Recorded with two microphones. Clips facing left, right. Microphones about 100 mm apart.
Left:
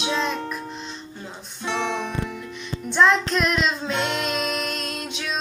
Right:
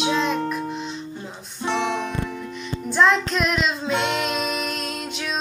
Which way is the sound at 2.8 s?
Centre (ahead or behind).